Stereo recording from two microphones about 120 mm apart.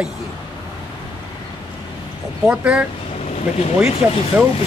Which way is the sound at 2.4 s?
10° right (ahead or behind).